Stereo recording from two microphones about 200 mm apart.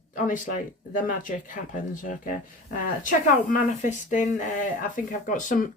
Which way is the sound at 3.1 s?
40° left (ahead or behind).